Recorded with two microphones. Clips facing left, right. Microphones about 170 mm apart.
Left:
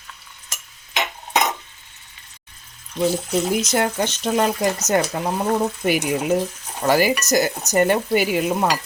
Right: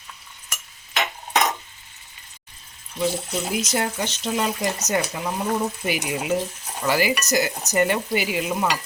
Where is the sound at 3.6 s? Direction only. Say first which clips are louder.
Left 4 dB; 55° left (ahead or behind).